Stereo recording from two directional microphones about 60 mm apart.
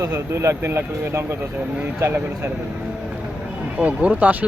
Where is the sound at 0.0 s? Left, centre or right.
Right.